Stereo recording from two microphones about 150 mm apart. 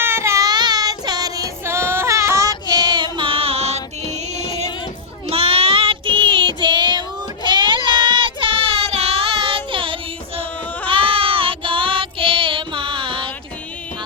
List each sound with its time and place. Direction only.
0.0 s child singing: 15° right (ahead or behind); by 13.3 s 35° right (ahead or behind)